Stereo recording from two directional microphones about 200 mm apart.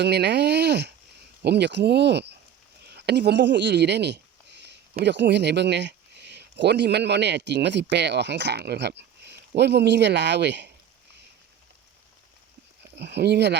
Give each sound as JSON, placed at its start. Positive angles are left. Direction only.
{"t": 0.0, "sound": "speech", "side_deg": -55}
{"t": 13.0, "sound": "speech", "side_deg": -55}